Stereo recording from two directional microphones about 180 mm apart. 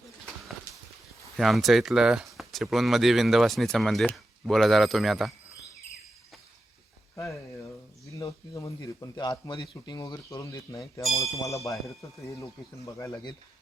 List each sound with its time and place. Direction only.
1.4 s speech: centre (ahead or behind)
8.1 s speech: 15° left (ahead or behind)
11.7 s speech: centre (ahead or behind)
12.4 s speech: 15° left (ahead or behind)